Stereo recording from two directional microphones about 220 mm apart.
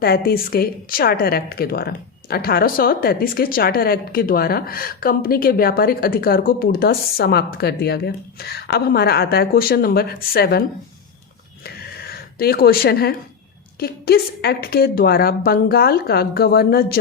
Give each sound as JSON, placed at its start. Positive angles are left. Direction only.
{"t": 0.0, "sound": "a woman's voice", "side_deg": 45}
{"t": 11.6, "sound": "a sound", "side_deg": 45}
{"t": 13.7, "sound": "a woman's voice", "side_deg": 45}